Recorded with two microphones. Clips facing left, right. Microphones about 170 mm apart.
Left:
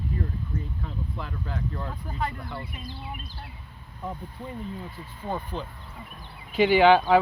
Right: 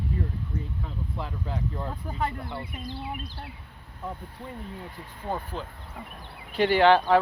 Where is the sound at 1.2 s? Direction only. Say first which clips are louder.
Right 2 dB; 25° right (ahead or behind).